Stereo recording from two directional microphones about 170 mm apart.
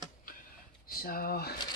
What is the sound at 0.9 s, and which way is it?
Speech, 60° left (ahead or behind).